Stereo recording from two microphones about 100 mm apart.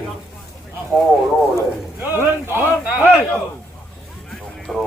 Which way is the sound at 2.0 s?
20° right (ahead or behind).